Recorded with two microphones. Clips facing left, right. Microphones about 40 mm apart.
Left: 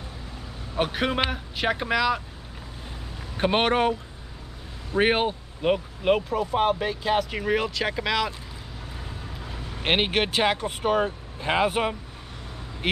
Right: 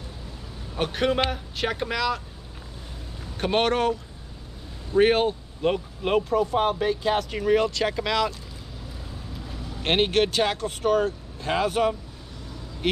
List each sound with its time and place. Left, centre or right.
0.7 s speech: centre
3.3 s speech: centre
4.9 s speech: centre
9.8 s speech: centre